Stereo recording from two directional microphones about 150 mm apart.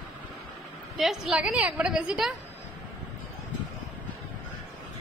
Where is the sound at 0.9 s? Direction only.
Centre (ahead or behind).